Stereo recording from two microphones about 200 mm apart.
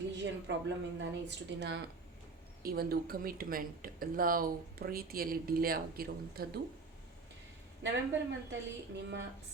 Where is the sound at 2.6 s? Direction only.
50° right (ahead or behind).